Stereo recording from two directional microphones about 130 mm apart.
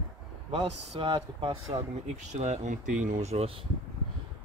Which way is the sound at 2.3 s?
60° right (ahead or behind).